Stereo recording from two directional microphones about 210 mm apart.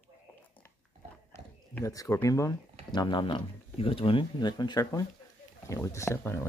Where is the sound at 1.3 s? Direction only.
15° left (ahead or behind).